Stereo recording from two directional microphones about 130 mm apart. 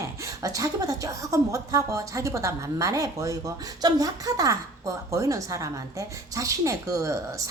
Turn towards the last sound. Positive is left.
turn(degrees=-25)  # may be behind; listen again after turning